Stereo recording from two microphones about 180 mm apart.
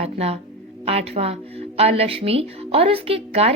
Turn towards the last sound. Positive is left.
turn(degrees=-35)  # may be behind; listen again after turning